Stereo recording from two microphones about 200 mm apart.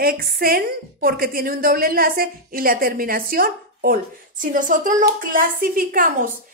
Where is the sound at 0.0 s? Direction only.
50° right (ahead or behind).